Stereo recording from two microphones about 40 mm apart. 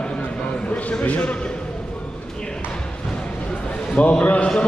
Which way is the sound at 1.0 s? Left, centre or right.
Left.